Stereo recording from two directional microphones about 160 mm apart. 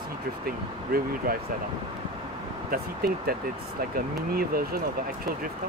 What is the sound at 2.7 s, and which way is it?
Speech, 70° right (ahead or behind).